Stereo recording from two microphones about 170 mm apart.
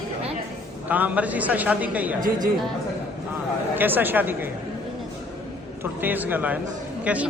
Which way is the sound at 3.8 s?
10° right (ahead or behind).